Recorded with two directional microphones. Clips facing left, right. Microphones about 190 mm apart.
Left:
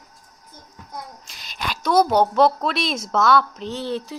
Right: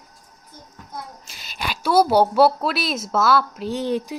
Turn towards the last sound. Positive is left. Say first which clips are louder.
# right 3 dB
turn(degrees=-15)  # may be behind; listen again after turning